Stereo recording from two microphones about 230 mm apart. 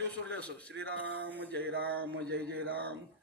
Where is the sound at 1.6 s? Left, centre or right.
Right.